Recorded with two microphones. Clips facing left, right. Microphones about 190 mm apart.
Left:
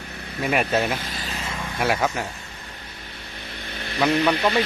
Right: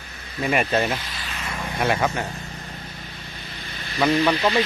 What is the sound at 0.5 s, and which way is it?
Speech, centre (ahead or behind).